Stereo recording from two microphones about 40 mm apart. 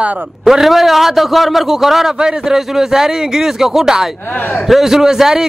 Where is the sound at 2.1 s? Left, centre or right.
Centre.